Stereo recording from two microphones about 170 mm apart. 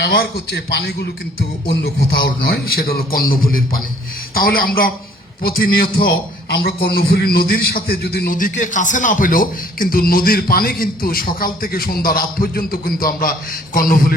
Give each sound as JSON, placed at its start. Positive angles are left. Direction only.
{"t": 0.0, "sound": "a man's voice", "side_deg": 65}